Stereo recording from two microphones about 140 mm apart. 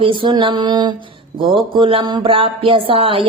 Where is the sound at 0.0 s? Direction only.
35° right (ahead or behind).